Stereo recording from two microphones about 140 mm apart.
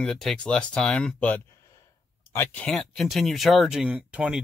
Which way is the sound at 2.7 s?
Centre (ahead or behind).